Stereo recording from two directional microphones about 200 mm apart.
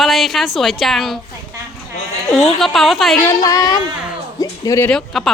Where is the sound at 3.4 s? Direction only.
15° left (ahead or behind); by 5.3 s centre (ahead or behind).